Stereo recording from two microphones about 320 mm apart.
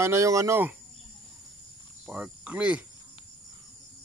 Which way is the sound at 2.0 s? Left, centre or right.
Centre.